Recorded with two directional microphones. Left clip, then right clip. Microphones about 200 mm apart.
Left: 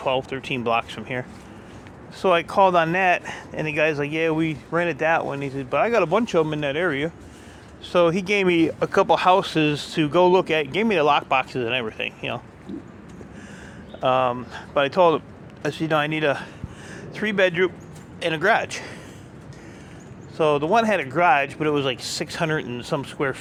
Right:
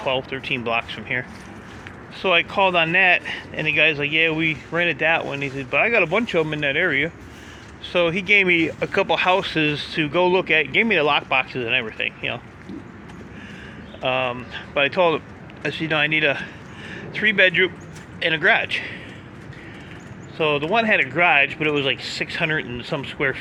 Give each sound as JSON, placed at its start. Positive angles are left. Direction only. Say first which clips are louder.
{"t": 0.0, "sound": "speech", "louder": "even", "side_deg": 25}
{"t": 2.2, "sound": "speech", "louder": "even", "side_deg": 30}
{"t": 7.9, "sound": "speech", "louder": "right 2 dB", "side_deg": 35}
{"t": 14.0, "sound": "speech", "louder": "left 2 dB", "side_deg": 30}
{"t": 20.3, "sound": "speech", "louder": "left 1 dB", "side_deg": 30}